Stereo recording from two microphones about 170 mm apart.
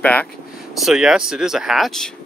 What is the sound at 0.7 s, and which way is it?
Speech, centre (ahead or behind).